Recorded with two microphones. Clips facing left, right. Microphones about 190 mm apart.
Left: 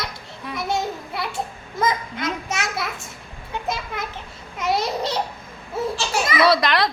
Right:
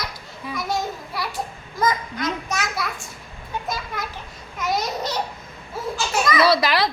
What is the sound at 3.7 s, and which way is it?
Children playing, 25° left (ahead or behind).